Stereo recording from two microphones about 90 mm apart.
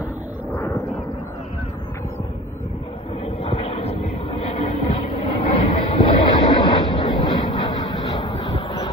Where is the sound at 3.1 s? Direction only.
90° left; by 6.2 s 75° left (ahead or behind).